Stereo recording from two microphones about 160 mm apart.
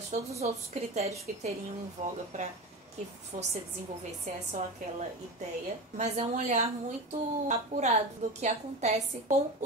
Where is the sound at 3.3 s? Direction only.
55° right (ahead or behind).